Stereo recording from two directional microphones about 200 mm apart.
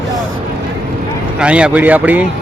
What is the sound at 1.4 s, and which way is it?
Speech, 5° right (ahead or behind).